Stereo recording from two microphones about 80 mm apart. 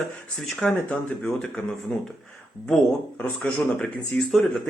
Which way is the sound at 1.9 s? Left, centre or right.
Centre.